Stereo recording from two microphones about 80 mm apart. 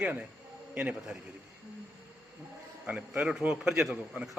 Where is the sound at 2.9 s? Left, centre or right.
Centre.